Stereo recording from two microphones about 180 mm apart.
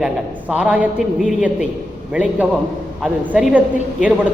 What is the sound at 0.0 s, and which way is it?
A man's voice, 5° right (ahead or behind).